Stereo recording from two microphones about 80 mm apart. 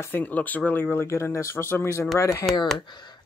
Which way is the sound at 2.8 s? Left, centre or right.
Left.